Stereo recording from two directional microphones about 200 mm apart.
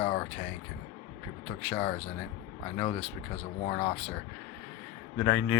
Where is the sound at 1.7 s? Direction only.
10° left (ahead or behind).